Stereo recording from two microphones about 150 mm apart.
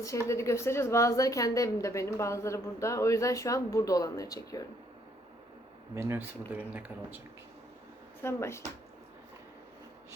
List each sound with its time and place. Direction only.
0.3 s a woman's voice: 20° left (ahead or behind)
5.9 s speech: 15° right (ahead or behind)
8.2 s speech: 15° left (ahead or behind)